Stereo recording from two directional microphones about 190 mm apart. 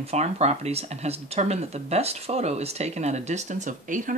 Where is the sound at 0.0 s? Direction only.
35° right (ahead or behind).